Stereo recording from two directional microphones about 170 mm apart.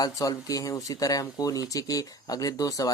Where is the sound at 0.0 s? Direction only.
20° left (ahead or behind).